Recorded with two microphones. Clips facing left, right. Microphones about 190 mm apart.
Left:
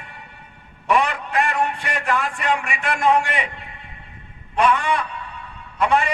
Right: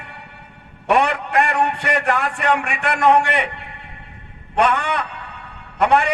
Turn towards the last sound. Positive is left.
turn(degrees=-65)  # may be behind; listen again after turning